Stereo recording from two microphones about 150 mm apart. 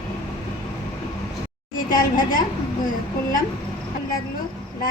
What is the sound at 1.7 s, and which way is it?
Speech, 65° left (ahead or behind).